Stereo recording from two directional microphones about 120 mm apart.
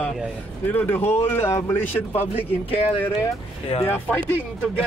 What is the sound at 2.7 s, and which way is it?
Speech, 50° left (ahead or behind).